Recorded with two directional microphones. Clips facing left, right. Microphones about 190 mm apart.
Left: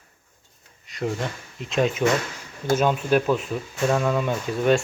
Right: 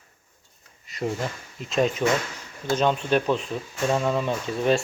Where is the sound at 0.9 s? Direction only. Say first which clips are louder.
Left 1 dB; centre (ahead or behind).